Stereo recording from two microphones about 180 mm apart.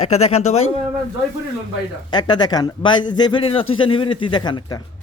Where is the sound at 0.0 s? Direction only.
35° left (ahead or behind).